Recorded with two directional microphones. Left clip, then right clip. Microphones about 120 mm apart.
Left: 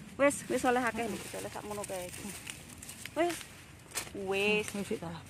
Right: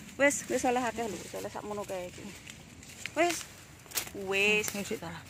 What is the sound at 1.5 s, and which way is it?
Speech, 40° right (ahead or behind).